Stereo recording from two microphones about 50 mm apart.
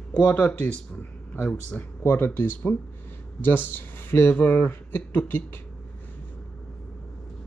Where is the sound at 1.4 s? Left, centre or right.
Left.